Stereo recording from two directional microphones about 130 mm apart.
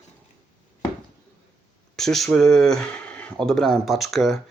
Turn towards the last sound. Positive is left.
turn(degrees=0)  # may be behind; listen again after turning